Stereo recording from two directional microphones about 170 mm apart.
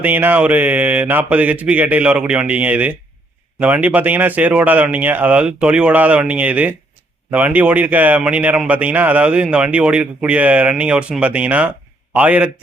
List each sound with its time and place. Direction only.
0.0 s a man's voice: 10° right (ahead or behind)